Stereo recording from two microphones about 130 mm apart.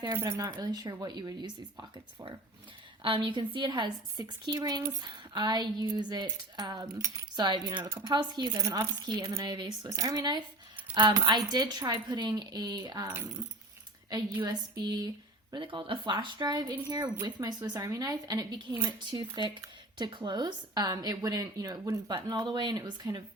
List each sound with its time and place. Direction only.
0.1 s a woman's voice: 20° right (ahead or behind)
3.0 s a woman's voice: 40° right (ahead or behind)
14.4 s speech: 30° right (ahead or behind)
15.5 s a woman's voice: 40° right (ahead or behind)